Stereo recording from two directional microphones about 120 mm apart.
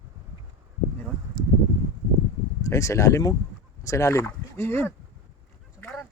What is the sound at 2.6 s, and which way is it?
Speech, 25° left (ahead or behind).